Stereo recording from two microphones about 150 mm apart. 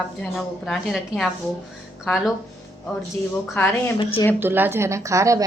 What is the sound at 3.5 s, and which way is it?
Speech, 15° left (ahead or behind).